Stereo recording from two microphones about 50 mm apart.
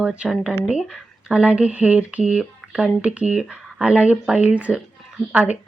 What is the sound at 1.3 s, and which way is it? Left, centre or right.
Speech, right.